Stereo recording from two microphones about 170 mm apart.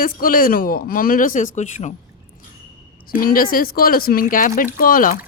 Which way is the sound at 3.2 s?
55° left (ahead or behind).